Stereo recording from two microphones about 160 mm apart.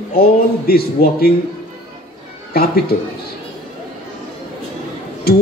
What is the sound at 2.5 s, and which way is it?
Speech, 75° left (ahead or behind).